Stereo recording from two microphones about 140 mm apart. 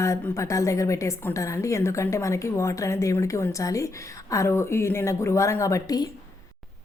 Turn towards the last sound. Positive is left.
turn(degrees=25)  # may be behind; listen again after turning